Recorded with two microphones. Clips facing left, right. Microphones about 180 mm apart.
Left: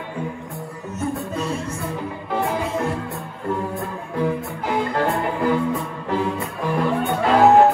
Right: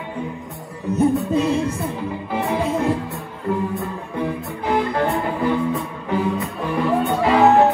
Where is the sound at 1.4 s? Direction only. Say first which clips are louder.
Right 6 dB; 60° right (ahead or behind).